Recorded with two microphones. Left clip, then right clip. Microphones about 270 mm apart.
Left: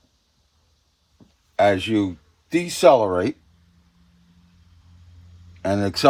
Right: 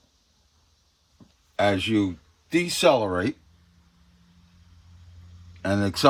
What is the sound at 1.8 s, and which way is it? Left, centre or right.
Speech, centre.